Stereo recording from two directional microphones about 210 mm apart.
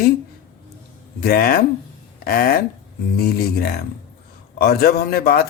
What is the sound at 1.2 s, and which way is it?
Speech, 45° left (ahead or behind).